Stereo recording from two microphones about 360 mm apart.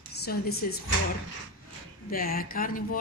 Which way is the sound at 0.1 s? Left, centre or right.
Left.